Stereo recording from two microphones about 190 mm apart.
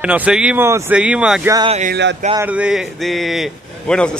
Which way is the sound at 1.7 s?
40° right (ahead or behind).